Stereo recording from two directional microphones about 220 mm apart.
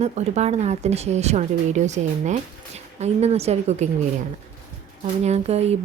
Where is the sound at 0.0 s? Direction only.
30° right (ahead or behind).